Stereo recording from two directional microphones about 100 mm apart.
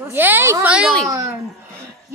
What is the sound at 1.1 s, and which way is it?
Female singing, 30° right (ahead or behind).